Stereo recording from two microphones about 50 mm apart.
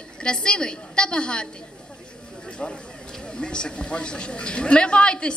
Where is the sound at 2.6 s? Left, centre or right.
Left.